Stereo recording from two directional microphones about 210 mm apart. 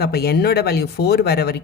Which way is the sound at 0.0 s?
50° left (ahead or behind).